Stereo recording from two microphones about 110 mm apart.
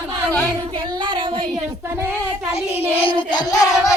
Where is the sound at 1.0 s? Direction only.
45° right (ahead or behind).